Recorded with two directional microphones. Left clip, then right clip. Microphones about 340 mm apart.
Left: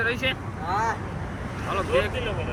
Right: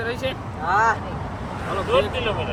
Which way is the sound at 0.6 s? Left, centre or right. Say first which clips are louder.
Right 7 dB; right.